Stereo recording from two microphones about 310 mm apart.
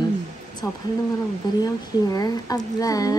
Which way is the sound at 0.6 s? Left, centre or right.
Centre.